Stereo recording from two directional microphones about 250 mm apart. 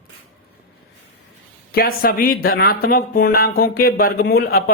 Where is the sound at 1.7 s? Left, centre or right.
Left.